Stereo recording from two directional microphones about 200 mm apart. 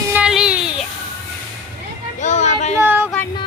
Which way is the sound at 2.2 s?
35° left (ahead or behind).